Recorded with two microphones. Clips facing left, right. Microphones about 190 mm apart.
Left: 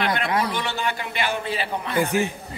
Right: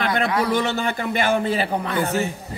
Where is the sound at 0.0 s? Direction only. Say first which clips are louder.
Right 3 dB; 45° right (ahead or behind).